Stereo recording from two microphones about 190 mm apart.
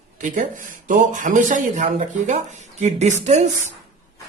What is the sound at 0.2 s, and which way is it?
Speech, 45° right (ahead or behind).